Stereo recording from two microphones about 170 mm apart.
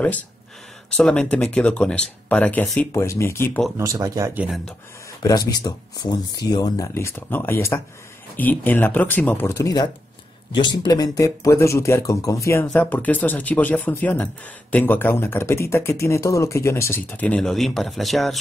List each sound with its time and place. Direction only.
0.8 s speech: 5° left (ahead or behind)
3.7 s speech: 20° right (ahead or behind)
4.3 s speech: 10° right (ahead or behind)
5.2 s speech: 20° left (ahead or behind)
12.6 s speech: 5° left (ahead or behind)